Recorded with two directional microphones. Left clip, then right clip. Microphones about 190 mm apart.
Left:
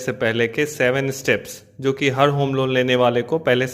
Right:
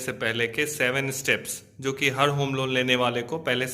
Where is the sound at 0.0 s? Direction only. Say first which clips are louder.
Left 6 dB; 35° left (ahead or behind).